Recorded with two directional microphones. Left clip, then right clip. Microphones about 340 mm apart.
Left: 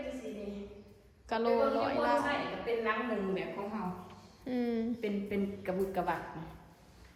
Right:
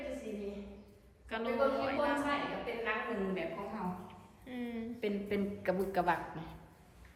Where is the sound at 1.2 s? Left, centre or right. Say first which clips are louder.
Left 6 dB; centre.